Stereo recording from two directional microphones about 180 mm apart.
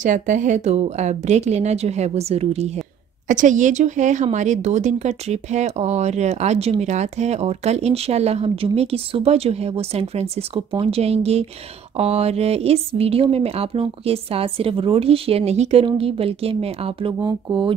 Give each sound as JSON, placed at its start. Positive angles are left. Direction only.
{"t": 0.0, "sound": "a woman's voice", "side_deg": -45}